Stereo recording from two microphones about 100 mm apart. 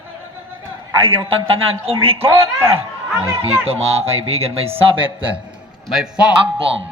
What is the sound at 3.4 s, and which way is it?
Speech, 80° right.